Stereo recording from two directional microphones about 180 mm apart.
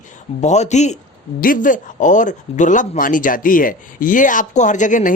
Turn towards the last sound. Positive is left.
turn(degrees=45)  # may be behind; listen again after turning